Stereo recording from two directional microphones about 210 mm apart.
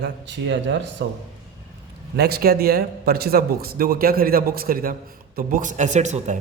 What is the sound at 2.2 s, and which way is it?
Speech, 50° right (ahead or behind).